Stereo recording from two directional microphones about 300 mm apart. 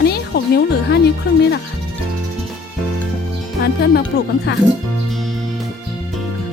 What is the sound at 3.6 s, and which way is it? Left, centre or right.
Speech, left.